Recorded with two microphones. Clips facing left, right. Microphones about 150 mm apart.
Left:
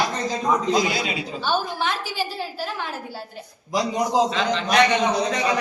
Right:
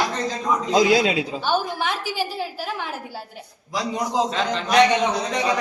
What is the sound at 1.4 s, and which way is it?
A woman's voice, 15° right (ahead or behind).